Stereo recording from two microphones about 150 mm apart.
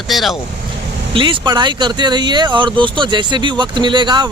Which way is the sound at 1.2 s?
30° right (ahead or behind).